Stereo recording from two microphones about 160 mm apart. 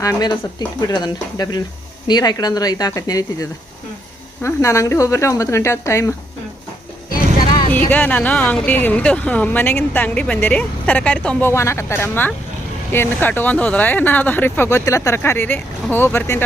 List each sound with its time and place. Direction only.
0.0 s speech: 25° left (ahead or behind)
4.4 s speech: 20° left (ahead or behind)
7.9 s speech: 10° left (ahead or behind)